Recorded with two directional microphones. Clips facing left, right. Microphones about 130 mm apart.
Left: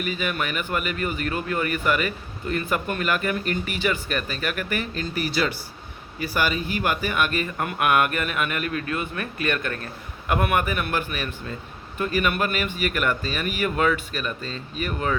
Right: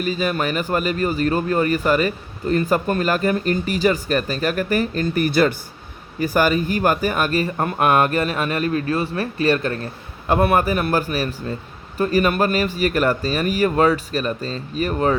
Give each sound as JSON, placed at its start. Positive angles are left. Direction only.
{"t": 0.0, "sound": "speech", "side_deg": -35}